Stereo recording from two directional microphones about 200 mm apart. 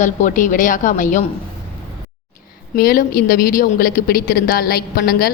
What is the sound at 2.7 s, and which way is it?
A woman's voice, 50° left (ahead or behind).